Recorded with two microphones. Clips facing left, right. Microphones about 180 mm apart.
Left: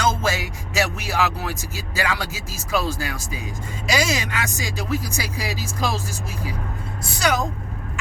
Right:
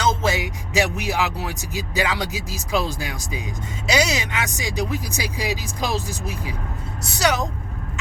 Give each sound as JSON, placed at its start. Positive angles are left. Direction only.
{"t": 0.0, "sound": "speech", "side_deg": -20}